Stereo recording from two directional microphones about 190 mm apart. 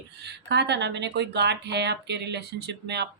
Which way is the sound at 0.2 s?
60° right (ahead or behind).